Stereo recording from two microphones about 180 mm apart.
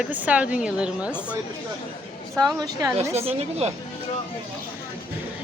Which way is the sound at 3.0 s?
35° right (ahead or behind).